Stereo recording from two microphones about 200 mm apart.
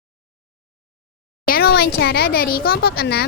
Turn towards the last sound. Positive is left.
turn(degrees=50)  # may be behind; listen again after turning